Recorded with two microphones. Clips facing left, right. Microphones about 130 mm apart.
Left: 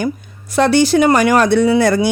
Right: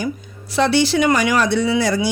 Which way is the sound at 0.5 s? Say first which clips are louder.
Left 4 dB; 50° left (ahead or behind).